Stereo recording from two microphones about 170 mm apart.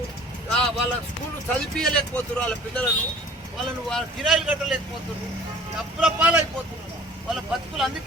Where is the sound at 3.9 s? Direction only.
Centre (ahead or behind).